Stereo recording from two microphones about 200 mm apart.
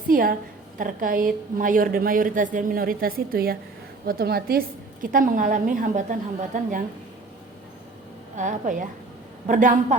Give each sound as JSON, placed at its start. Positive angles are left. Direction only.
{"t": 0.1, "sound": "a woman's voice", "side_deg": -45}
{"t": 8.4, "sound": "a woman's voice", "side_deg": -40}